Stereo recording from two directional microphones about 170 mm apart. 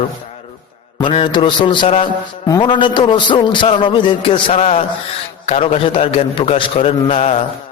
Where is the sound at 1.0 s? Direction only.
30° left (ahead or behind).